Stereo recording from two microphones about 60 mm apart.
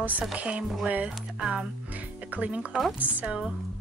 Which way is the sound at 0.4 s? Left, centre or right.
Right.